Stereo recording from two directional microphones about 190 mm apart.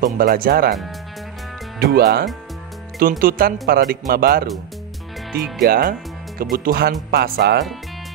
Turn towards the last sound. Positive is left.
turn(degrees=-55)  # may be behind; listen again after turning